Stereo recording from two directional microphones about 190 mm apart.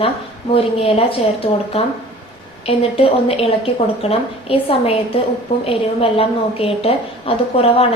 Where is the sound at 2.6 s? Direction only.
30° left (ahead or behind).